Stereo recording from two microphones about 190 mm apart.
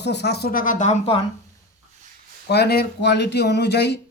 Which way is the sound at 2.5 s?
60° left (ahead or behind).